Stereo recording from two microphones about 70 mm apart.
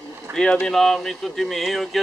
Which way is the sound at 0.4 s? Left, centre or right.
Centre.